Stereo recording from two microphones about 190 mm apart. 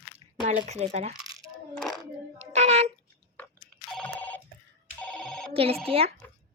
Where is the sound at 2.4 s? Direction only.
35° right (ahead or behind).